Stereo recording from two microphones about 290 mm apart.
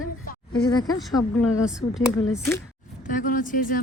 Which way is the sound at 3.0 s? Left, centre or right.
Left.